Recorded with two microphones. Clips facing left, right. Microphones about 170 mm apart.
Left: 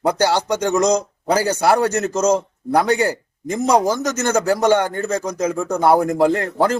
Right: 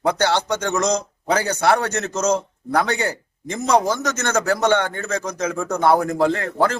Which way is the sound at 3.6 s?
10° left (ahead or behind).